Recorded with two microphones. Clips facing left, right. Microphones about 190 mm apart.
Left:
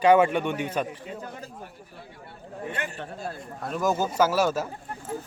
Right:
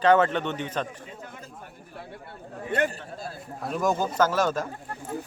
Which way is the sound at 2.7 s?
40° right (ahead or behind).